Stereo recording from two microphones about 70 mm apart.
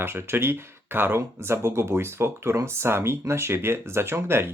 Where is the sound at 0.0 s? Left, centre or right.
Right.